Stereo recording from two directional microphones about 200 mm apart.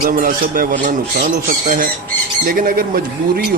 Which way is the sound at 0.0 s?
45° right (ahead or behind).